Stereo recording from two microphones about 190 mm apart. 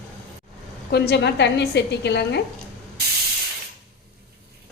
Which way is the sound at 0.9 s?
55° left (ahead or behind).